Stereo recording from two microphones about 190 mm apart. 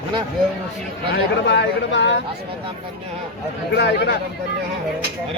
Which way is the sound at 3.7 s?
65° left (ahead or behind).